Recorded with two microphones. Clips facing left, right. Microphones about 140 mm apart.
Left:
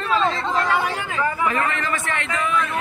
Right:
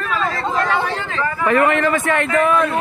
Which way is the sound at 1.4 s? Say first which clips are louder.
Right 7 dB; 60° right (ahead or behind).